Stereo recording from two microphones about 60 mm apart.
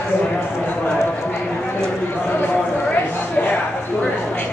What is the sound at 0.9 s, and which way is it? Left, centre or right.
Clip-clop, left.